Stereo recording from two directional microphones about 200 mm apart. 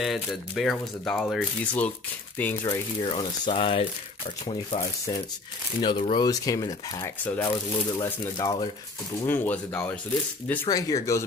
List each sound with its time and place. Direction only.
0.0 s speech: centre (ahead or behind)
3.0 s speech: 25° left (ahead or behind)